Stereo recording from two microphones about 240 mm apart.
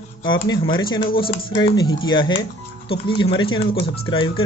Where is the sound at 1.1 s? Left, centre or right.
Left.